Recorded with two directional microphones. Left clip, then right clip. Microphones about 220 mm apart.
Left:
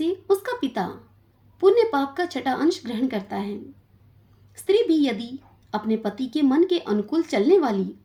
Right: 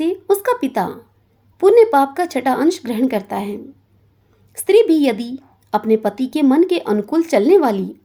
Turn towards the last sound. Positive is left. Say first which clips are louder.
# right 6 dB
turn(degrees=-40)  # may be behind; listen again after turning